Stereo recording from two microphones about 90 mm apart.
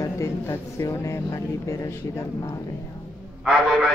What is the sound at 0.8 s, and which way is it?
Speech, 40° left (ahead or behind).